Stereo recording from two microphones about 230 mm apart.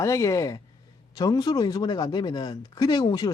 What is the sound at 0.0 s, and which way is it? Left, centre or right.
Speech, centre.